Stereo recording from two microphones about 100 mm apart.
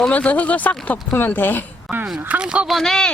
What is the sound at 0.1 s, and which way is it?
Speech, 15° left (ahead or behind).